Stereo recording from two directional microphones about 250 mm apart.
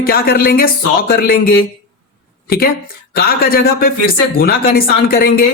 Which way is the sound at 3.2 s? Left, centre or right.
Left.